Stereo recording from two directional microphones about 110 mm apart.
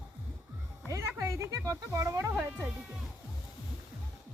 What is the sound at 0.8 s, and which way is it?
Speech, 25° right (ahead or behind).